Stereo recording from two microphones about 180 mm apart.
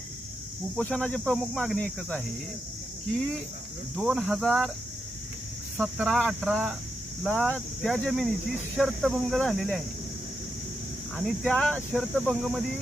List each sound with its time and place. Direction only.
0.8 s speech: 5° left (ahead or behind)
5.7 s speech: centre (ahead or behind)
11.3 s speech: 5° left (ahead or behind)